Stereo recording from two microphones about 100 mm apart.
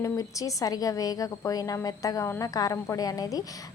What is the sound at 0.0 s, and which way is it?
A woman's voice, 35° left (ahead or behind).